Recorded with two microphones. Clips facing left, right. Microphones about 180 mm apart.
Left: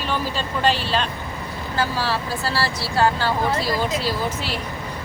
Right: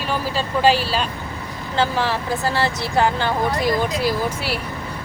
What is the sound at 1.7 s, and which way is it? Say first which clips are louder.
Speech: right 3 dB; 20° right (ahead or behind).